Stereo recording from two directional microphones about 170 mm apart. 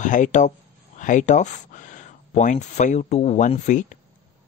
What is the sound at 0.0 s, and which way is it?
Speech, 45° left (ahead or behind).